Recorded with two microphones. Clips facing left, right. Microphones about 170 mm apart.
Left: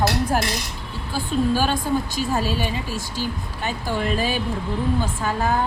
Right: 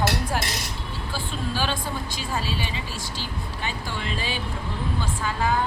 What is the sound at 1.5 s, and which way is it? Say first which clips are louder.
A woman's voice: left 7 dB; 45° left (ahead or behind).